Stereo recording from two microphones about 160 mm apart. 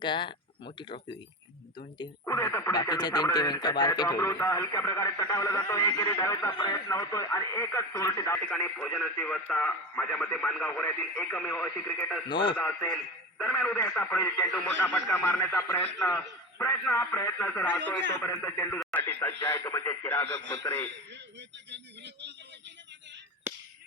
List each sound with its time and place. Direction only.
0.0 s speech: 30° left (ahead or behind)
2.0 s speech: 15° left (ahead or behind)
12.3 s speech: 30° left (ahead or behind)
12.5 s speech: 10° left (ahead or behind)
18.8 s speech: centre (ahead or behind)
19.4 s speech: 20° left (ahead or behind)
21.7 s speech: 90° right
23.5 s a sound: 15° right (ahead or behind)